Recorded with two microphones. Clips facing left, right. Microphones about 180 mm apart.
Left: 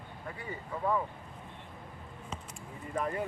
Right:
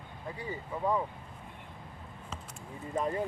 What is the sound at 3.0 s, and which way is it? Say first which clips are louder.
Speech: right 2 dB; 20° right (ahead or behind).